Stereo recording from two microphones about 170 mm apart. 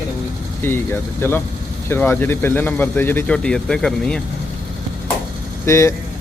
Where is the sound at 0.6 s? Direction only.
15° left (ahead or behind).